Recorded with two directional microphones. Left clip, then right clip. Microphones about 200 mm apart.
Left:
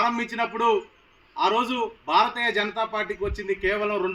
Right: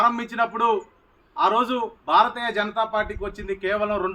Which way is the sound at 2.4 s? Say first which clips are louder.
Left 1 dB; centre (ahead or behind).